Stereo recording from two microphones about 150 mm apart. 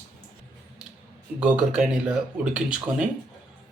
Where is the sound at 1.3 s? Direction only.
5° right (ahead or behind).